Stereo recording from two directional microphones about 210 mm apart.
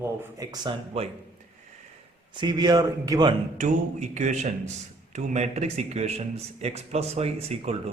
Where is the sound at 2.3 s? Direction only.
20° right (ahead or behind).